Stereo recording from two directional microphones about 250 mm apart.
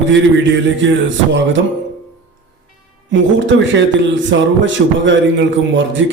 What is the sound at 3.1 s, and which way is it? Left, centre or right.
Speech, right.